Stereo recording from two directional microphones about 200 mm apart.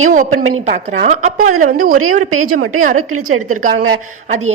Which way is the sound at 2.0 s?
90° right.